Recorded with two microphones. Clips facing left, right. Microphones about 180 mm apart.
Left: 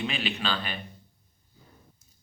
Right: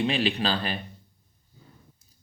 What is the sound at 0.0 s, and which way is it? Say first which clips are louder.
Speech: right 6 dB; 35° right (ahead or behind).